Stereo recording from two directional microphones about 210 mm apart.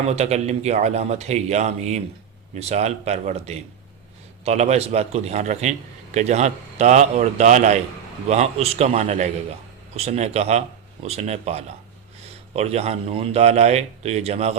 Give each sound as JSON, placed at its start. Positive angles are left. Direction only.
{"t": 0.1, "sound": "a man's voice", "side_deg": -30}